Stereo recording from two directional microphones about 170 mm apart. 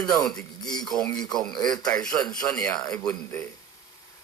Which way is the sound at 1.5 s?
25° left (ahead or behind).